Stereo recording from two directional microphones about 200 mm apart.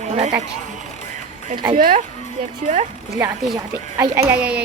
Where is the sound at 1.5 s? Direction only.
25° right (ahead or behind).